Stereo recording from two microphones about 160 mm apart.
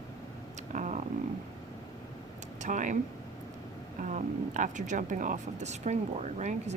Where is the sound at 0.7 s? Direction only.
50° right (ahead or behind).